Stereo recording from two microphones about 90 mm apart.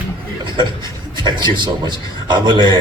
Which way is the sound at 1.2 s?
60° right (ahead or behind).